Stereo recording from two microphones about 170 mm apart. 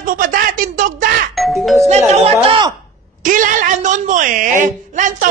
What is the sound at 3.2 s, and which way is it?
Speech, 50° right (ahead or behind).